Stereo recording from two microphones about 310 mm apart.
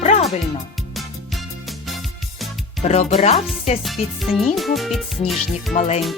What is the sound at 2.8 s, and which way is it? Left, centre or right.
Speech, left.